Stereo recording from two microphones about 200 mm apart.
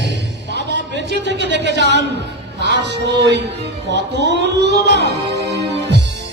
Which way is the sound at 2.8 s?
60° right (ahead or behind).